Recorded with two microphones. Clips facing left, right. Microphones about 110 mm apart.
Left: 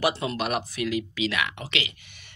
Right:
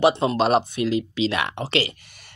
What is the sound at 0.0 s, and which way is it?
Speech, 30° right (ahead or behind).